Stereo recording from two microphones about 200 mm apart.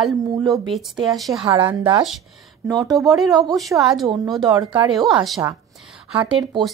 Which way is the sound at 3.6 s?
Centre (ahead or behind).